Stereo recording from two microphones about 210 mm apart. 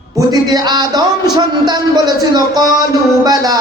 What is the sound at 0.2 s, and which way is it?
A man's voice, 20° right (ahead or behind).